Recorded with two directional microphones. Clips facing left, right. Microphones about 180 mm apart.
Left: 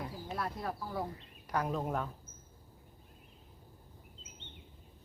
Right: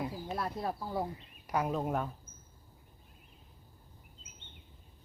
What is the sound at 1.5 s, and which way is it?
Speech, 10° right (ahead or behind).